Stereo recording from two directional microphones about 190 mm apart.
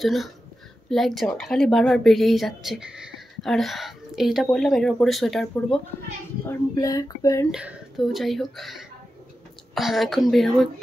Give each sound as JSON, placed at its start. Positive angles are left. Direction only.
{"t": 0.0, "sound": "speech", "side_deg": 0}
{"t": 6.4, "sound": "speech", "side_deg": 15}
{"t": 7.5, "sound": "speech", "side_deg": 0}